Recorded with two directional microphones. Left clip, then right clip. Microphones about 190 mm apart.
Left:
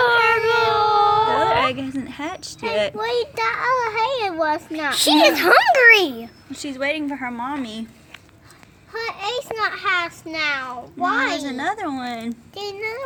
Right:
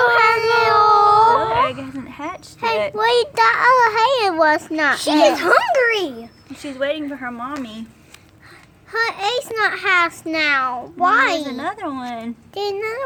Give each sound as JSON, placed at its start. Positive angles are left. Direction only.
{"t": 0.0, "sound": "a sound", "side_deg": -20}
{"t": 1.4, "sound": "a sound", "side_deg": 15}
{"t": 2.9, "sound": "a child's voice", "side_deg": -25}
{"t": 4.9, "sound": "a child's voice", "side_deg": 5}
{"t": 8.9, "sound": "a child's voice", "side_deg": -50}
{"t": 11.6, "sound": "a child's voice", "side_deg": 0}
{"t": 12.5, "sound": "a child's voice", "side_deg": -40}